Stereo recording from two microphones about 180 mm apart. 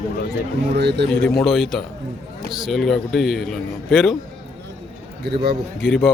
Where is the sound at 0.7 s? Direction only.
70° right (ahead or behind).